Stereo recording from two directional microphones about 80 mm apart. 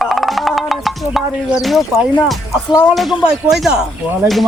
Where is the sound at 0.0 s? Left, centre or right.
Centre.